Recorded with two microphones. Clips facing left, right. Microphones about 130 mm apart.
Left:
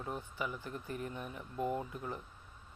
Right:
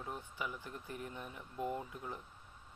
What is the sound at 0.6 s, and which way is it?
Speech, 20° right (ahead or behind).